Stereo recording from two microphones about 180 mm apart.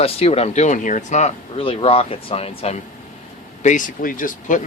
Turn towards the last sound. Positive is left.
turn(degrees=45)  # may be behind; listen again after turning